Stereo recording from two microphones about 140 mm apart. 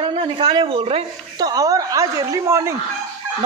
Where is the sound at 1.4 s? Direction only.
25° right (ahead or behind).